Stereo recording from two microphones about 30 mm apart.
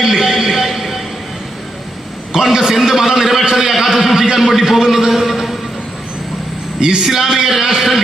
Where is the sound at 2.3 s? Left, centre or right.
Centre.